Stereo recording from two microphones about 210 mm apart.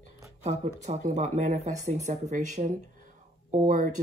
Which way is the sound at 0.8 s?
35° right (ahead or behind).